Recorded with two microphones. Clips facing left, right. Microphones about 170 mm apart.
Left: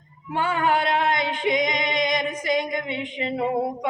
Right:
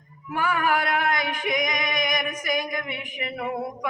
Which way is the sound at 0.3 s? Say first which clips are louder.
Left 2 dB; 25° left (ahead or behind).